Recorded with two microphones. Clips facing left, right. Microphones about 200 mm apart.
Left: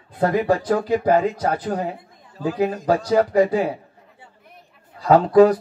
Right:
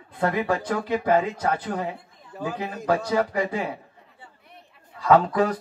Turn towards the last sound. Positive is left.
turn(degrees=35)  # may be behind; listen again after turning